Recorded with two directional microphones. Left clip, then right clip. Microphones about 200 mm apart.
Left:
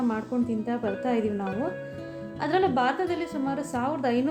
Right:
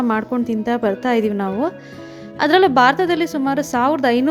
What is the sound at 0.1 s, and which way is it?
A woman's voice, 45° right (ahead or behind).